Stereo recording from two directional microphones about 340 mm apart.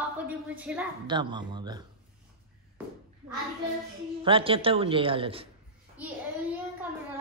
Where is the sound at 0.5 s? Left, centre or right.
Centre.